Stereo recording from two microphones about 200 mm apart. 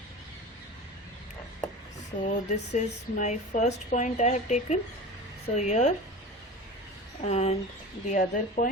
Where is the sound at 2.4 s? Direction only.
35° left (ahead or behind).